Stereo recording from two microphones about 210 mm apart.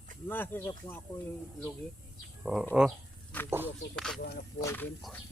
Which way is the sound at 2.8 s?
Centre (ahead or behind).